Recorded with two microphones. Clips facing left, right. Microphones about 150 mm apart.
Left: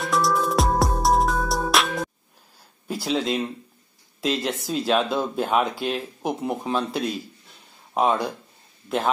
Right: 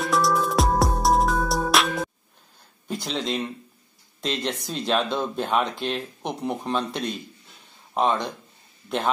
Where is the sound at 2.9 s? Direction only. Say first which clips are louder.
Left 4 dB; 5° left (ahead or behind).